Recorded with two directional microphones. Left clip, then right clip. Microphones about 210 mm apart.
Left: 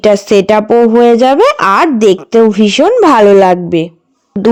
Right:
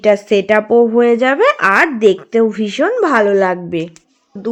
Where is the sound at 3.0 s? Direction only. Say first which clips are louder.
Left 7 dB; 35° left (ahead or behind).